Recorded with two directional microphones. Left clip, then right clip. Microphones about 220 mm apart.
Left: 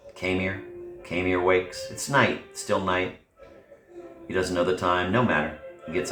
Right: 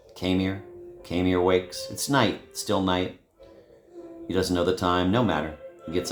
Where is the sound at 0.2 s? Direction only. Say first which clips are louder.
Even; 50° right (ahead or behind).